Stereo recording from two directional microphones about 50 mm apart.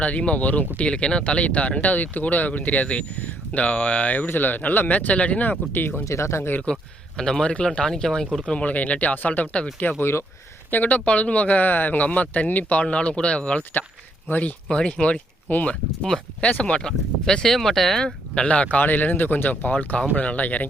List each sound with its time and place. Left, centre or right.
0.0 s speech: left
4.3 s speech: left
5.7 s speech: left
6.1 s speech: left
7.2 s speech: centre
8.4 s speech: left
10.0 s speech: left
10.7 s speech: left
12.8 s speech: left
15.4 s speech: left
16.4 s speech: left; by 18.0 s centre
18.0 s speech: left
18.8 s speech: left